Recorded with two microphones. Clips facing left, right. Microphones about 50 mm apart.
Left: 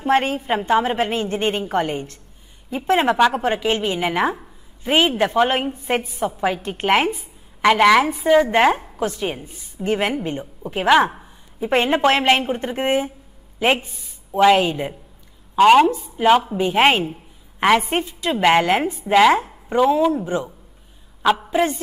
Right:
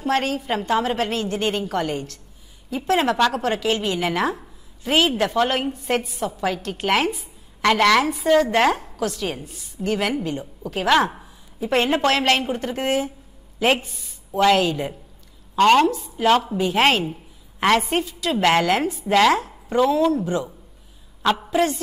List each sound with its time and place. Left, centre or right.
0.0 s a woman's voice: left
10.1 s a woman's voice: left
17.0 s a sound: centre
17.9 s a woman's voice: left
21.2 s a woman's voice: centre